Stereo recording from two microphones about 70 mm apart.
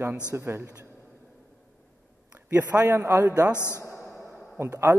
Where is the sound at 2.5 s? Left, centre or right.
Right.